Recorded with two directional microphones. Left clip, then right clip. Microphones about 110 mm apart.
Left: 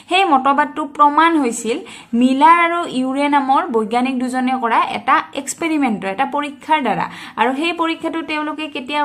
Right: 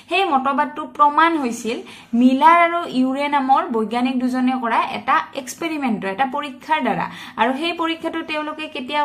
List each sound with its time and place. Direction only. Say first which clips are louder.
0.1 s speech: left 5 dB; 50° left (ahead or behind); by 9.0 s 30° left (ahead or behind)